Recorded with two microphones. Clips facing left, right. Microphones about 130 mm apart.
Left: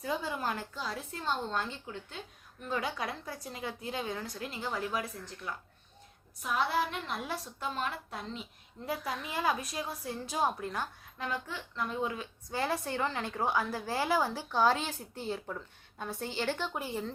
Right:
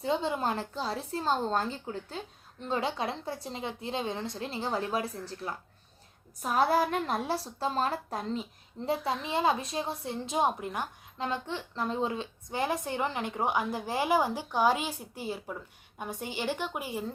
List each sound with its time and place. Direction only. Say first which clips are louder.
0.0 s a woman's voice: right 5 dB; 25° right (ahead or behind)
8.9 s a woman's voice: right 6 dB; 25° right (ahead or behind)